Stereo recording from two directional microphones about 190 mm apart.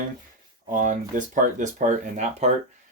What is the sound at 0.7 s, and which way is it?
Speech, 45° right (ahead or behind).